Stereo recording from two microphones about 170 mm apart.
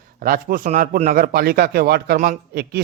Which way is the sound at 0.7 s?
45° right (ahead or behind).